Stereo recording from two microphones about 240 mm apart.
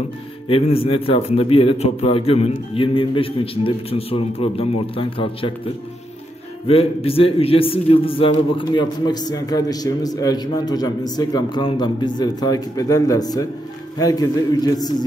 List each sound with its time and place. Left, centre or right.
0.5 s a man's voice: left
6.7 s a man's voice: left